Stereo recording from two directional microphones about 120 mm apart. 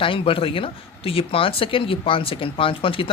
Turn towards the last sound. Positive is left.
turn(degrees=50)  # may be behind; listen again after turning